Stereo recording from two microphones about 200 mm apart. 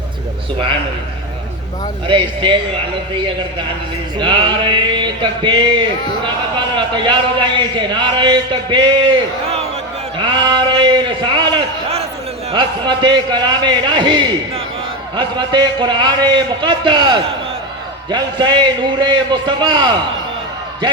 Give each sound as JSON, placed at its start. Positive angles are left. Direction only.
{"t": 2.0, "sound": "a man's voice", "side_deg": -25}
{"t": 4.2, "sound": "a man's voice", "side_deg": -25}